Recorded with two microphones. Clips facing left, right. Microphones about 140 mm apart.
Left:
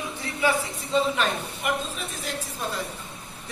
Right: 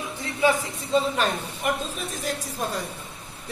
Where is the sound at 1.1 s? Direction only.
35° right (ahead or behind).